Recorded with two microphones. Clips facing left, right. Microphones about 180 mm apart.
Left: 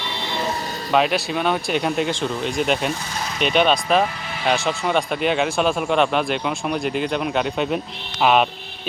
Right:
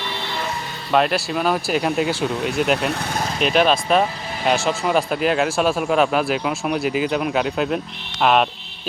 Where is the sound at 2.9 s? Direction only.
60° right (ahead or behind).